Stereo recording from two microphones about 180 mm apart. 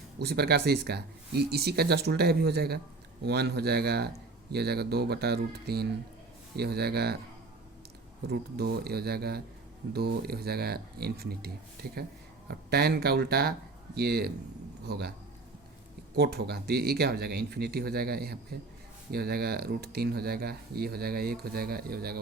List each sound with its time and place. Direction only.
0.2 s speech: 60° right (ahead or behind)
8.3 s speech: 60° right (ahead or behind)
16.1 s speech: 60° right (ahead or behind)